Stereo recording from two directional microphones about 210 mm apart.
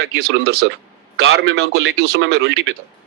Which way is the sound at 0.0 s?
50° right (ahead or behind).